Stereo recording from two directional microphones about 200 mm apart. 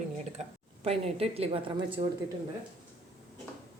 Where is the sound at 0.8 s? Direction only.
30° right (ahead or behind).